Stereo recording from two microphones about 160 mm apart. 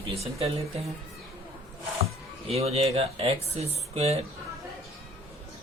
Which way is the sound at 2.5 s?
40° right (ahead or behind).